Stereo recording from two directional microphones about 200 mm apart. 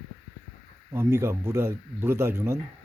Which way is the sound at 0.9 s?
10° right (ahead or behind).